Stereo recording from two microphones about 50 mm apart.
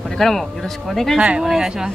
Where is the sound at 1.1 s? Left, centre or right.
Right.